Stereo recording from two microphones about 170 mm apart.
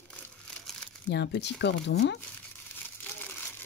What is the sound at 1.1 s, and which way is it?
Speech, 90° left.